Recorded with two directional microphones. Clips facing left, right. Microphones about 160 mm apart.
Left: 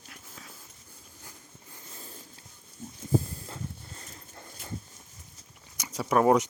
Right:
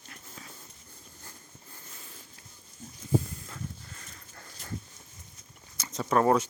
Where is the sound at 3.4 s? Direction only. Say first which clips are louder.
Left 1 dB; 30° left (ahead or behind).